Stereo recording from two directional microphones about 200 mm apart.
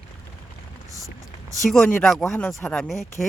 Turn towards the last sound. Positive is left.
turn(degrees=0)  # may be behind; listen again after turning